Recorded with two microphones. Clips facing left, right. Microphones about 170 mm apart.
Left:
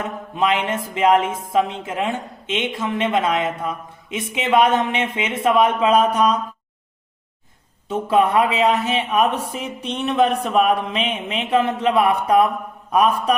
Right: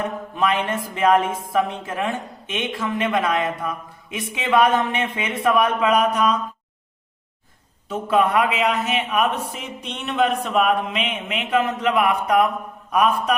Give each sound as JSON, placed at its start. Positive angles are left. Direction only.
{"t": 0.3, "sound": "a woman's voice", "side_deg": 20}
{"t": 7.9, "sound": "a woman's voice", "side_deg": 25}